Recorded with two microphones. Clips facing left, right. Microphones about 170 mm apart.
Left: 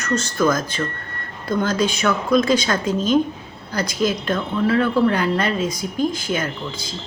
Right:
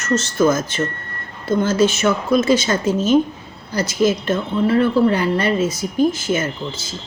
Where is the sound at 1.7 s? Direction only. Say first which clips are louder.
Right 4 dB; 5° right (ahead or behind).